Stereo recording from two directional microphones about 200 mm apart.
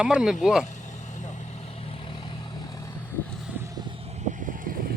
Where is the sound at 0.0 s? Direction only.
5° right (ahead or behind).